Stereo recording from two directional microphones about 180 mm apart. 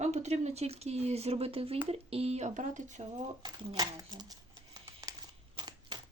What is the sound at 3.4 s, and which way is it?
Crumpling, 25° right (ahead or behind).